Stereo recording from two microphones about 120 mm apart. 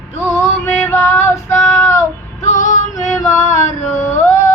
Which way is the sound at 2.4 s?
90° left.